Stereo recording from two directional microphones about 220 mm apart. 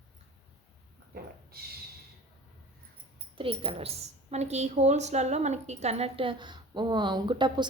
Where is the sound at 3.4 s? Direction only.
25° right (ahead or behind).